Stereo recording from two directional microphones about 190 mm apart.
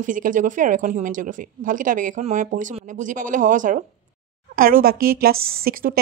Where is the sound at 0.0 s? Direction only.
45° right (ahead or behind).